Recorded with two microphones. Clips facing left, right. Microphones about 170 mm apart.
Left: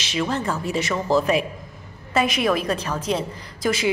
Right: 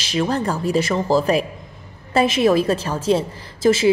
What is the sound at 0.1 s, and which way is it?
A woman's voice, 35° right (ahead or behind).